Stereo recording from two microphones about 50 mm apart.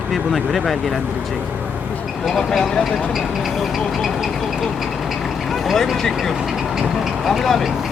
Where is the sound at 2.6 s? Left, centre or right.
Centre.